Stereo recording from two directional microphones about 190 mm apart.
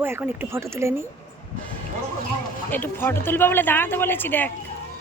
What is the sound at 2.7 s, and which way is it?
Speech, 10° left (ahead or behind).